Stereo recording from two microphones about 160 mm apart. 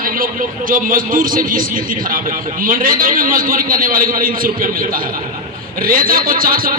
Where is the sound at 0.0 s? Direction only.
60° right (ahead or behind).